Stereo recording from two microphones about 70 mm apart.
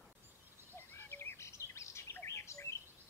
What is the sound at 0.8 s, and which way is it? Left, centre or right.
Bird, left.